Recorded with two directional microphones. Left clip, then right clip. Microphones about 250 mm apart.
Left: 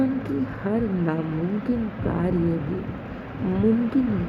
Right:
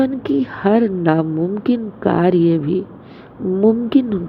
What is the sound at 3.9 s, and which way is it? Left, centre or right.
Speech, right.